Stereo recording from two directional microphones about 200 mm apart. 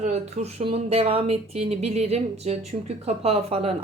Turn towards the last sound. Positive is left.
turn(degrees=-30)  # may be behind; listen again after turning